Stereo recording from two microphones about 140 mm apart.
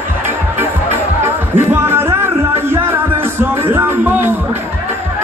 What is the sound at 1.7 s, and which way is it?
Music, 15° right (ahead or behind).